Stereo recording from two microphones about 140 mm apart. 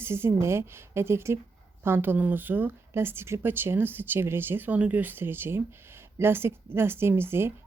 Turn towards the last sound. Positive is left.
turn(degrees=-15)  # may be behind; listen again after turning